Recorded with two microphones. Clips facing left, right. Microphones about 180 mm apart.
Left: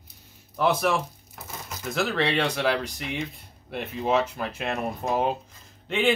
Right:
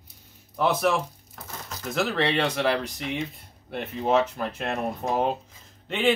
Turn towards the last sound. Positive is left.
turn(degrees=0)  # may be behind; listen again after turning